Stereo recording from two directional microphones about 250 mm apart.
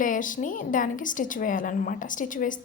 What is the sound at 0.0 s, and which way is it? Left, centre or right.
A woman's voice, left.